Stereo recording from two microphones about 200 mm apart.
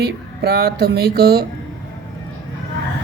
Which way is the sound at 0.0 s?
50° right (ahead or behind).